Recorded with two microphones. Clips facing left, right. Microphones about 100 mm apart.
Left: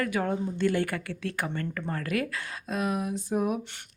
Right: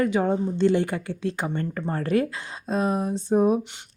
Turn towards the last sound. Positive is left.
turn(degrees=-30)  # may be behind; listen again after turning